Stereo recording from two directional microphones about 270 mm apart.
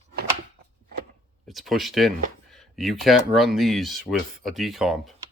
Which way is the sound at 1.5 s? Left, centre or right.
Centre.